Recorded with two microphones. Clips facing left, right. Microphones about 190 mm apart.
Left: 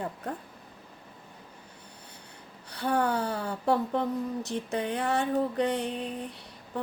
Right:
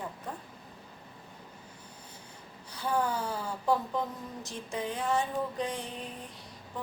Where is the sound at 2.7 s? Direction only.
65° left (ahead or behind).